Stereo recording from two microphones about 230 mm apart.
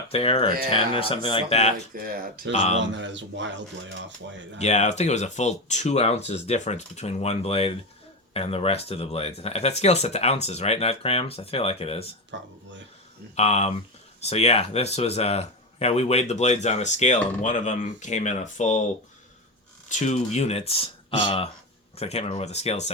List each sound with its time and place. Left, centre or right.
0.1 s speech: left
1.9 s speech: right
2.5 s speech: left
2.9 s speech: right
4.5 s speech: left
12.3 s speech: right
13.3 s speech: left
19.9 s speech: left